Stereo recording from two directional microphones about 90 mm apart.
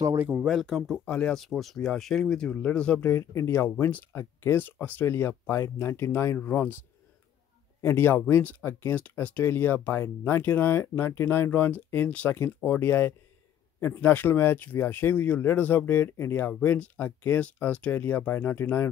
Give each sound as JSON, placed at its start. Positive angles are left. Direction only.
{"t": 0.2, "sound": "speech", "side_deg": -15}
{"t": 0.5, "sound": "speech", "side_deg": 0}
{"t": 1.0, "sound": "speech", "side_deg": 15}
{"t": 7.8, "sound": "speech", "side_deg": 25}